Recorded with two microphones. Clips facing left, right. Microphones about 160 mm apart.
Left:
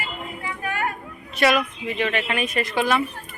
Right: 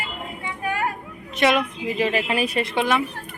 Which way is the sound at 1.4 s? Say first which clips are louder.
Even; 25° right (ahead or behind).